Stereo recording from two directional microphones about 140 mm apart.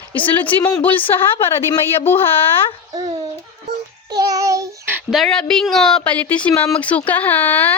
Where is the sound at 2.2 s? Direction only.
40° left (ahead or behind).